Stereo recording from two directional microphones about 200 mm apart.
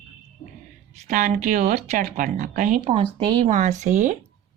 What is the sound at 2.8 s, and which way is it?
Speech, 30° right (ahead or behind).